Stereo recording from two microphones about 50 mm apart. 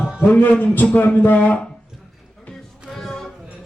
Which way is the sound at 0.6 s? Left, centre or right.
Left.